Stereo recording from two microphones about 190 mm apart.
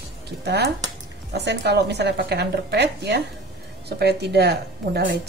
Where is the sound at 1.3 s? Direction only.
60° right (ahead or behind).